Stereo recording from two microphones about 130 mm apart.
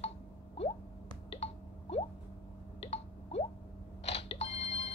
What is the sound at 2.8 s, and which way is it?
Drip, 55° left (ahead or behind).